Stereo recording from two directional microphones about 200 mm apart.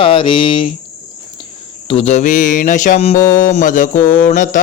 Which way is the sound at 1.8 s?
30° left (ahead or behind).